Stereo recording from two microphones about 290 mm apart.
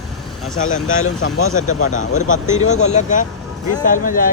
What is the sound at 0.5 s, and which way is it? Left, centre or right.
Speech, left.